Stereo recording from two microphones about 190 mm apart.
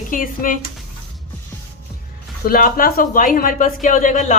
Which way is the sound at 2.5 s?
50° left (ahead or behind).